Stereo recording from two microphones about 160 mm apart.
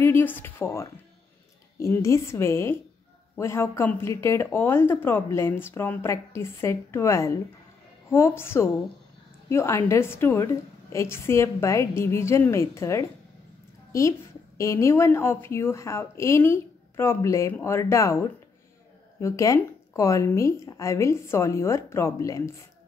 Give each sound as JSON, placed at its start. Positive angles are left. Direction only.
{"t": 0.0, "sound": "a woman's voice", "side_deg": 15}
{"t": 14.6, "sound": "a woman's voice", "side_deg": 20}